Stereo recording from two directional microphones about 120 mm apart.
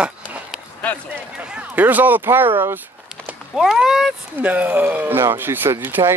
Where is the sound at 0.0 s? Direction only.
10° right (ahead or behind).